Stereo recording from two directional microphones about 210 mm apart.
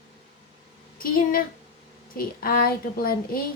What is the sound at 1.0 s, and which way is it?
A woman's voice, 45° left (ahead or behind).